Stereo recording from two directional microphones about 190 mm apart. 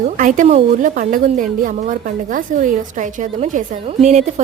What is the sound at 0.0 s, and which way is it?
A woman's voice, 40° right (ahead or behind).